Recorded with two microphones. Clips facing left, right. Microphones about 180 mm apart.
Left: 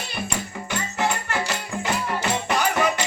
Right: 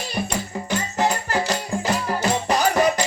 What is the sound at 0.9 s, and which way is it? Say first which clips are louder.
Music: right 3 dB; 35° right (ahead or behind).